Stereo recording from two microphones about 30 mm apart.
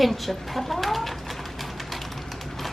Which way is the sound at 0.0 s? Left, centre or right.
Centre.